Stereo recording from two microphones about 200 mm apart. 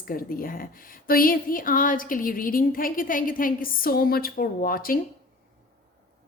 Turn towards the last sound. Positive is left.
turn(degrees=45)  # may be behind; listen again after turning